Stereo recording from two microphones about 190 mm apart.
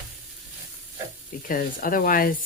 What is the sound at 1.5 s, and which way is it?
Speech, 45° left (ahead or behind).